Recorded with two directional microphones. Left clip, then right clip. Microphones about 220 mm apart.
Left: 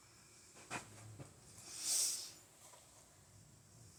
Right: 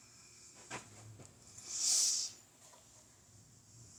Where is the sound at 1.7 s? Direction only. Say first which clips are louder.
Right 10 dB; 40° right (ahead or behind).